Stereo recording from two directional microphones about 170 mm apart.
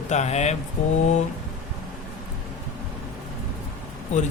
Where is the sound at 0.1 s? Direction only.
40° left (ahead or behind).